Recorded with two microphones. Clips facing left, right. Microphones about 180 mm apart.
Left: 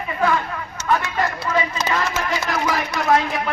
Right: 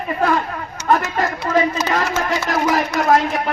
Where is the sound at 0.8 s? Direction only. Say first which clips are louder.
Right 4 dB; 40° right (ahead or behind).